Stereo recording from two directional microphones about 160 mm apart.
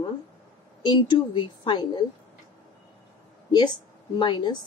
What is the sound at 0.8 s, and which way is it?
A woman's voice, 30° left (ahead or behind).